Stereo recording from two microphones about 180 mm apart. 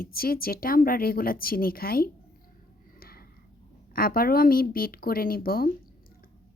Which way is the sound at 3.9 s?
55° left (ahead or behind).